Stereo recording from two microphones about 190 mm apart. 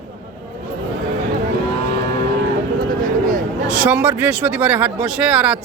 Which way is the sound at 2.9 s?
45° right (ahead or behind).